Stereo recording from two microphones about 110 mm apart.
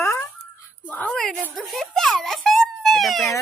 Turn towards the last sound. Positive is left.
turn(degrees=0)  # may be behind; listen again after turning